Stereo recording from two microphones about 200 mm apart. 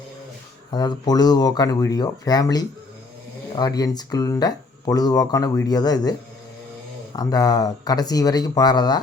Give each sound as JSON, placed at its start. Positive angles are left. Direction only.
{"t": 0.7, "sound": "speech", "side_deg": 20}